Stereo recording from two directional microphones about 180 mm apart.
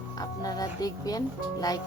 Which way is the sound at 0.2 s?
20° left (ahead or behind).